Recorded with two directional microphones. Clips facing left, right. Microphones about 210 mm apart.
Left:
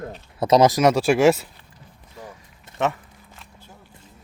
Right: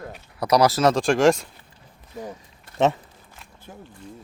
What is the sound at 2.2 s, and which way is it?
Speech, 20° right (ahead or behind).